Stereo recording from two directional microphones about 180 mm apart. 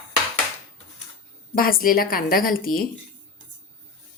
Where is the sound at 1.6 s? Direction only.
55° left (ahead or behind).